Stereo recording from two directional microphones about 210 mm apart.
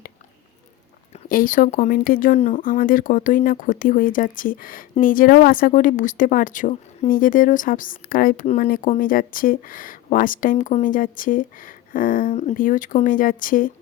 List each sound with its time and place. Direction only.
1.3 s speech: 40° left (ahead or behind)